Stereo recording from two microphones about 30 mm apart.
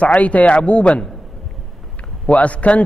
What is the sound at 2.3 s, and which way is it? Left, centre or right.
Speech, left.